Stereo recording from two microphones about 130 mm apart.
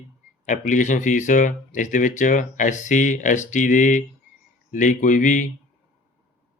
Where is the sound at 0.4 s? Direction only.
75° left (ahead or behind).